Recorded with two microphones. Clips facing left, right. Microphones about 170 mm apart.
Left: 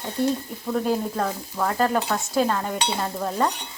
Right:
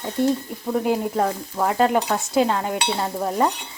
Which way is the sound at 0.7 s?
15° right (ahead or behind).